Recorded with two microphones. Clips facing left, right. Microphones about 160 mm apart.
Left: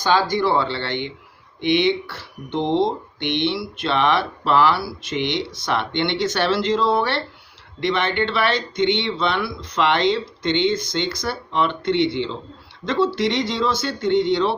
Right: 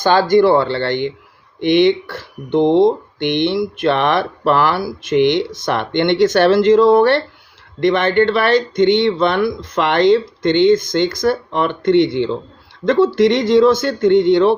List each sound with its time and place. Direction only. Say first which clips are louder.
0.0 s speech: right 7 dB; 50° right (ahead or behind)